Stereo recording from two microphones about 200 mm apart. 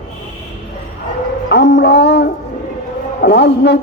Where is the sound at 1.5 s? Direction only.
55° left (ahead or behind).